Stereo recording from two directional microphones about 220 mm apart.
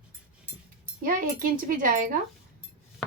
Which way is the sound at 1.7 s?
35° right (ahead or behind).